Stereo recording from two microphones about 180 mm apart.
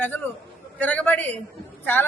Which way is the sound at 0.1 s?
10° left (ahead or behind).